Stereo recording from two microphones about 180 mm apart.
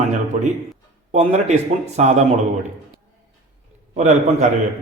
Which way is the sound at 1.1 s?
40° right (ahead or behind).